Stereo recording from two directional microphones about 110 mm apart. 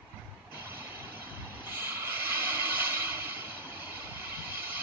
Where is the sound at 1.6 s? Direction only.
20° right (ahead or behind).